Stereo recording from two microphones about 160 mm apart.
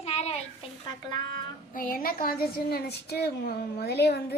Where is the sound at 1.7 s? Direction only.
65° left (ahead or behind).